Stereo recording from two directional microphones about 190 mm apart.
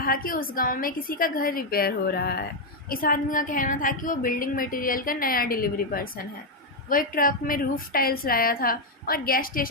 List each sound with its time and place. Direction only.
0.0 s a woman's voice: 50° left (ahead or behind)